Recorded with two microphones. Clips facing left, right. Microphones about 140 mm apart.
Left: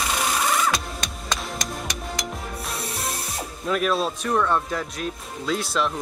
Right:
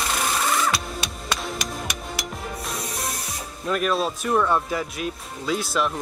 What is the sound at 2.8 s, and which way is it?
Spray, 30° left (ahead or behind).